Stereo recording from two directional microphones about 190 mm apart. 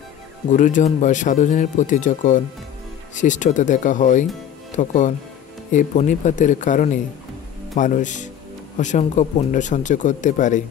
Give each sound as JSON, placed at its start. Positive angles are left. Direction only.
{"t": 0.5, "sound": "speech", "side_deg": 45}